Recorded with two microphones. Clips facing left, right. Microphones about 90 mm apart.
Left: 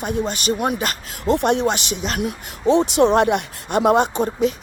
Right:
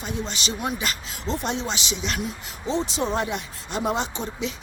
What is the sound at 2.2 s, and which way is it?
Speech, 65° left (ahead or behind).